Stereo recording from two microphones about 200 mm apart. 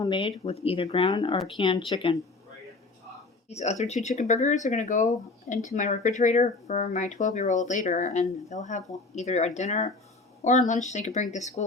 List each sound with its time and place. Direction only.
0.0 s speech: 25° left (ahead or behind)
3.5 s speech: 35° left (ahead or behind)